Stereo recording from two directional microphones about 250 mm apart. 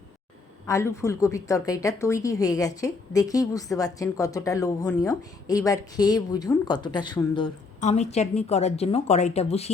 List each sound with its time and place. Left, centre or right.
0.7 s a woman's voice: centre